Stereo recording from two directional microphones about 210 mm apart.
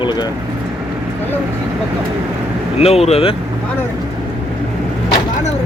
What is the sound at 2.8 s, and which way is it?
Speech, 30° left (ahead or behind).